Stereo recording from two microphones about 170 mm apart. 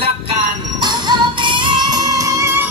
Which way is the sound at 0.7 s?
25° right (ahead or behind).